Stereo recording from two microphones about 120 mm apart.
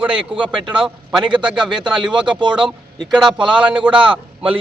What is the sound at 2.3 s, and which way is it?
Speech, 40° right (ahead or behind).